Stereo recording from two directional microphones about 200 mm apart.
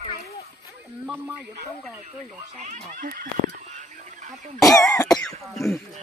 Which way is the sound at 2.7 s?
45° right (ahead or behind).